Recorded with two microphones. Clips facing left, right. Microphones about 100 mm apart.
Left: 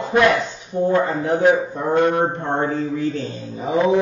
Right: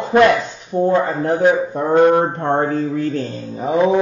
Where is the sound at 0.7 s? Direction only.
40° right (ahead or behind).